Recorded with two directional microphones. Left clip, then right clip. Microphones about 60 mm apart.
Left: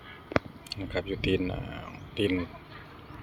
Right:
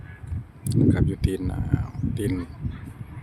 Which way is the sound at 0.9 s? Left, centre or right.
Right.